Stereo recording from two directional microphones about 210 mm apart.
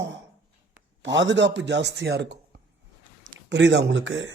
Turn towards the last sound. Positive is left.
turn(degrees=-60)  # may be behind; listen again after turning